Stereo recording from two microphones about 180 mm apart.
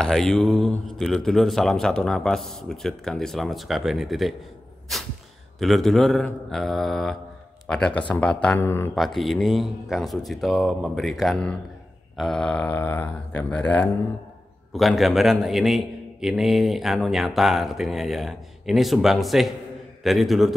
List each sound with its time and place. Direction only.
0.0 s a man's voice: centre (ahead or behind)
4.9 s a sound: centre (ahead or behind)
5.6 s a man's voice: centre (ahead or behind)
8.9 s a man's voice: centre (ahead or behind)